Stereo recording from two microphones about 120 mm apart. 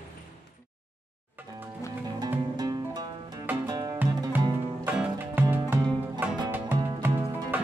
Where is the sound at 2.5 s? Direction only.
35° right (ahead or behind).